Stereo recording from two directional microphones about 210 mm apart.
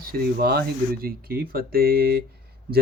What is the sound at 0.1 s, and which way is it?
Speech, 50° right (ahead or behind).